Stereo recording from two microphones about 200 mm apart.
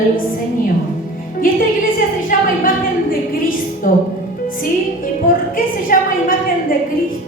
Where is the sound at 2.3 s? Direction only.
40° left (ahead or behind).